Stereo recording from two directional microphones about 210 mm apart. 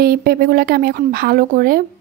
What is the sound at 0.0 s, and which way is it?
A woman's voice, 45° right (ahead or behind).